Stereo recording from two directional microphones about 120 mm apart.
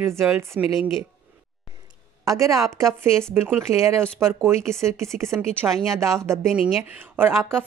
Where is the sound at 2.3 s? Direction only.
25° right (ahead or behind).